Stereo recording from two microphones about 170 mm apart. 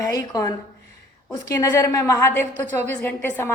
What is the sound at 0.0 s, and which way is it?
A woman's voice, 20° left (ahead or behind).